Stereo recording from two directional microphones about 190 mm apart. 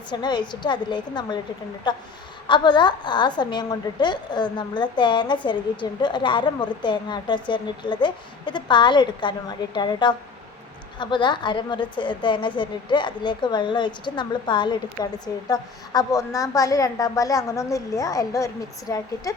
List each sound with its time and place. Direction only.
0.1 s a woman's voice: 25° left (ahead or behind)